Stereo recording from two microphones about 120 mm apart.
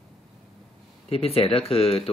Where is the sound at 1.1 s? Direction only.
55° left (ahead or behind).